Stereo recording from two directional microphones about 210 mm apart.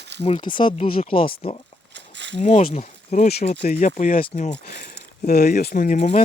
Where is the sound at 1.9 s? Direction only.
60° right (ahead or behind).